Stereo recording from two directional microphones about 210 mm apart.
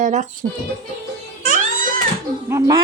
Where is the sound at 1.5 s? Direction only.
40° right (ahead or behind).